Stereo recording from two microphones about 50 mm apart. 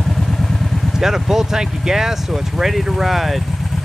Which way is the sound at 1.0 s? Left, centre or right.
Centre.